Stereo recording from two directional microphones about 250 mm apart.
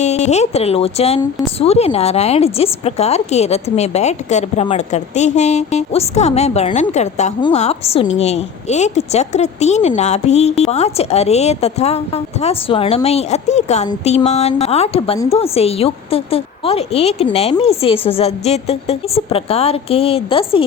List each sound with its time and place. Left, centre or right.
0.0 s a woman's voice: left